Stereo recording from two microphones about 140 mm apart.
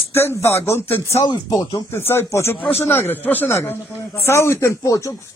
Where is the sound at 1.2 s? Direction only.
25° left (ahead or behind).